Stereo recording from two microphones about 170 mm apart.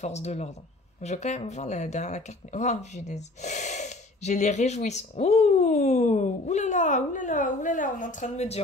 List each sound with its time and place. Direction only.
0.0 s speech: 40° left (ahead or behind)